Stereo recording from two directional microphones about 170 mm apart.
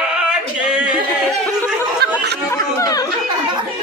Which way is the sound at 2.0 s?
70° right (ahead or behind).